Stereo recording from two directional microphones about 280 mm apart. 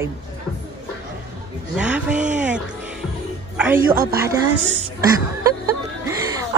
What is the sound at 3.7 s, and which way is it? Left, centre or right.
Speech, right.